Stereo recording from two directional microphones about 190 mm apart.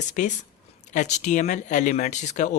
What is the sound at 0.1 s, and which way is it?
Speech, 40° left (ahead or behind).